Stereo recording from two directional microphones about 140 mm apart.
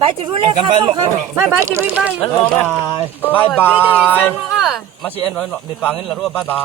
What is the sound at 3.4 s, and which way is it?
Speech, 10° left (ahead or behind).